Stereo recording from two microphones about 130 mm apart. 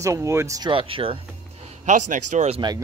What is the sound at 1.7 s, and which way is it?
Speech, 70° right (ahead or behind).